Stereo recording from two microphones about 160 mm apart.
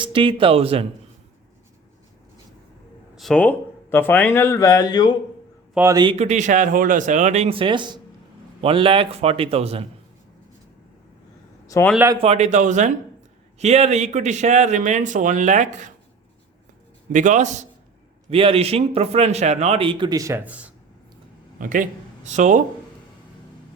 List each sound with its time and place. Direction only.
0.0 s a man's voice: 30° right (ahead or behind)
3.2 s speech: 5° left (ahead or behind); by 5.1 s 25° left (ahead or behind)
5.7 s a man's voice: 15° right (ahead or behind)
6.1 s a man's voice: 45° right (ahead or behind)
11.6 s a sound: 20° left (ahead or behind)
12.2 s speech: 45° right (ahead or behind)
17.1 s speech: 50° right (ahead or behind)
18.3 s a man's voice: 35° right (ahead or behind); by 20.7 s 10° right (ahead or behind)
21.6 s speech: 55° right (ahead or behind)